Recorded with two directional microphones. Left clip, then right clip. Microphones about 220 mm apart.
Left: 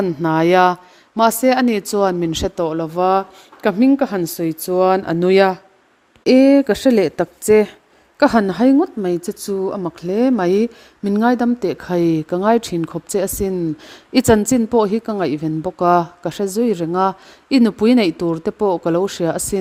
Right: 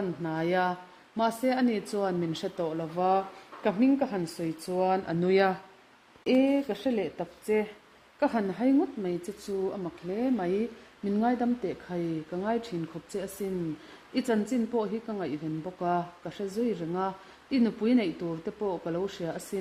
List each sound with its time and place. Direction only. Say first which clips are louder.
0.2 s speech: left 16 dB; 50° left (ahead or behind)